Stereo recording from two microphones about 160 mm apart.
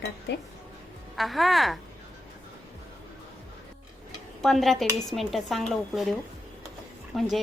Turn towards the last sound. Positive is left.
turn(degrees=0)  # may be behind; listen again after turning